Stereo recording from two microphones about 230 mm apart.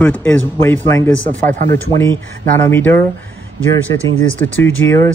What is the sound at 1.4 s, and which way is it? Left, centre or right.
Speech, right.